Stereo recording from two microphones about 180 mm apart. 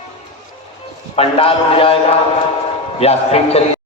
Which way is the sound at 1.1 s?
30° left (ahead or behind).